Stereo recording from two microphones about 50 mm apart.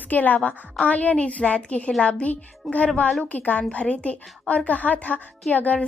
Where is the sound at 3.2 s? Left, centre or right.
Left.